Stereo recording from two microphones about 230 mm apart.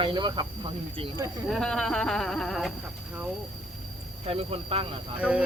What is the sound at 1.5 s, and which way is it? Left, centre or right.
Speech, centre.